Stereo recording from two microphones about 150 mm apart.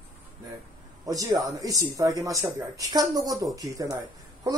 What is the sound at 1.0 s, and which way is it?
A man's voice, 25° right (ahead or behind).